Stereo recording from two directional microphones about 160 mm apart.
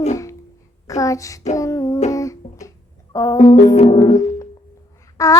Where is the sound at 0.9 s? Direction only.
20° left (ahead or behind).